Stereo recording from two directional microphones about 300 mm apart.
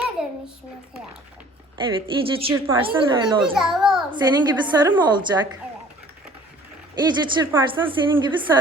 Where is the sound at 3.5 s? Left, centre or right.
Centre.